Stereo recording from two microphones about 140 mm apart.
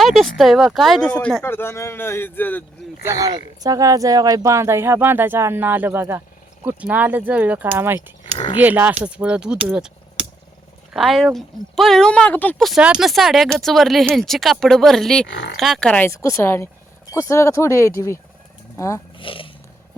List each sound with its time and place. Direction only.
0.0 s speech: centre (ahead or behind)
1.4 s speech: 15° left (ahead or behind)
3.1 s speech: 25° right (ahead or behind); by 9.9 s 5° right (ahead or behind)
10.9 s speech: centre (ahead or behind)
12.6 s speech: 5° right (ahead or behind)
16.0 s speech: 20° left (ahead or behind)
19.2 s a sound: 40° left (ahead or behind)